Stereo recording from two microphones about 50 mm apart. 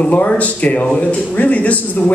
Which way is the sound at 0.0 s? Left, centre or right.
Left.